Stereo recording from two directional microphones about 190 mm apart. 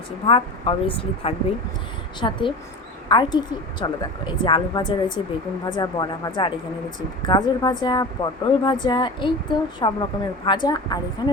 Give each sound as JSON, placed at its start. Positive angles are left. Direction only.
{"t": 0.3, "sound": "speech", "side_deg": 30}